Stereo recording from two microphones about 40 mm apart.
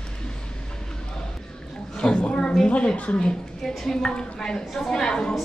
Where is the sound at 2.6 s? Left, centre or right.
Left.